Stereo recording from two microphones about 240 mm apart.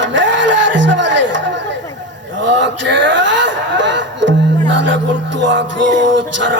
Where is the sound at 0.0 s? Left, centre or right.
Right.